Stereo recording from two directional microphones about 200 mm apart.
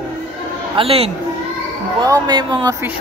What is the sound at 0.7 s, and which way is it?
Speech, 30° right (ahead or behind).